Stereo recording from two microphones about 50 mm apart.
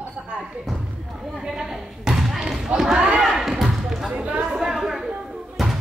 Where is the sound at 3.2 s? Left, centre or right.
Centre.